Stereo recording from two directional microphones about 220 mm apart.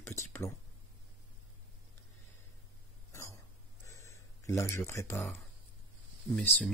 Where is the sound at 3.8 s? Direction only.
15° left (ahead or behind).